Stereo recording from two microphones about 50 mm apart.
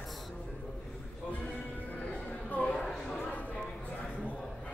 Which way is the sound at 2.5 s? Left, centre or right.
Left.